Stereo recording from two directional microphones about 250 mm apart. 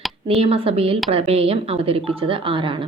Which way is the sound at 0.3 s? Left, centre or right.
Right.